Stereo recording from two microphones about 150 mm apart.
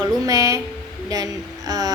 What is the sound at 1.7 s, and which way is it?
Speech, 25° right (ahead or behind).